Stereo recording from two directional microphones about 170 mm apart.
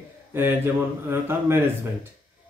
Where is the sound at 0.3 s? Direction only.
15° right (ahead or behind).